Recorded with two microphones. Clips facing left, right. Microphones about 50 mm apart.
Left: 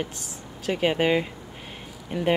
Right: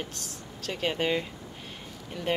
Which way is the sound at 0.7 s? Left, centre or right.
Centre.